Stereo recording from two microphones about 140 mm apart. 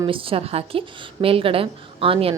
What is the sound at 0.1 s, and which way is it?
A woman's voice, 40° right (ahead or behind).